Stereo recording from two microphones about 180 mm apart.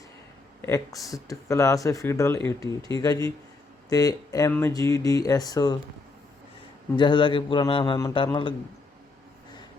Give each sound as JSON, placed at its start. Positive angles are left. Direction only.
{"t": 0.6, "sound": "speech", "side_deg": 20}
{"t": 6.9, "sound": "speech", "side_deg": 25}